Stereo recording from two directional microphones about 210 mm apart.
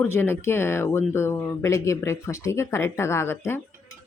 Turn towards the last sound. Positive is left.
turn(degrees=10)  # may be behind; listen again after turning